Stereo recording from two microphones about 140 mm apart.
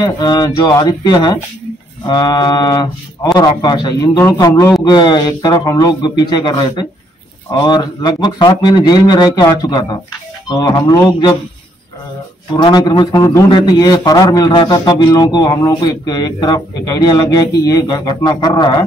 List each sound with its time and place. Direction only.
0.0 s a man's voice: 30° left (ahead or behind)
12.5 s a man's voice: 30° left (ahead or behind)